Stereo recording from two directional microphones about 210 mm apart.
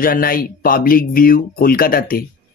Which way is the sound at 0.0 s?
45° left (ahead or behind).